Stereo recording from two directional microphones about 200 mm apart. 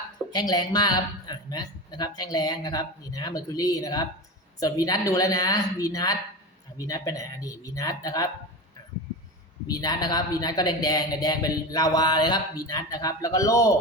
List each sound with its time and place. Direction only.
0.3 s a man's voice: 20° left (ahead or behind)
9.6 s a man's voice: 20° left (ahead or behind)